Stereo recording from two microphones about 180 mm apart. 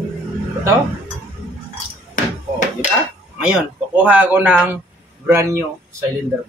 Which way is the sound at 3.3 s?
5° right (ahead or behind).